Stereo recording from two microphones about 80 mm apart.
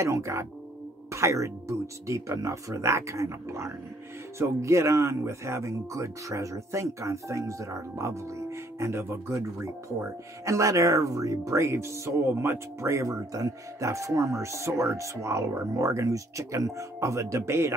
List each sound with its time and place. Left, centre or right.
0.0 s speech: right